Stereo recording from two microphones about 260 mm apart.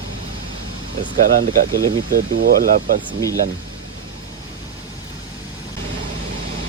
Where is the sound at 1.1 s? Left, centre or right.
Right.